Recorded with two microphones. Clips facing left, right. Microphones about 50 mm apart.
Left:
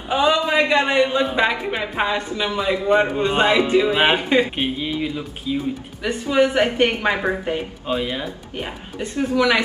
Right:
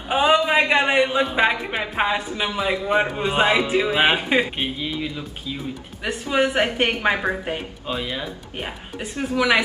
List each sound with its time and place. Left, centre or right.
0.1 s a sound: right
0.5 s a man's voice: right
1.0 s a woman's voice: centre
4.2 s a woman's voice: centre
4.6 s speech: centre
6.3 s a woman's voice: centre
7.8 s speech: centre
8.5 s a woman's voice: centre